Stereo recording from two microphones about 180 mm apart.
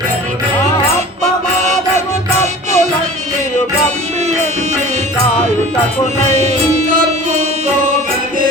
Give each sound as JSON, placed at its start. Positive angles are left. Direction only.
{"t": 2.4, "sound": "music", "side_deg": -40}